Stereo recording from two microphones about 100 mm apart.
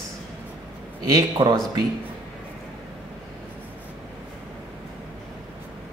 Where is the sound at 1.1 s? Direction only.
45° right (ahead or behind).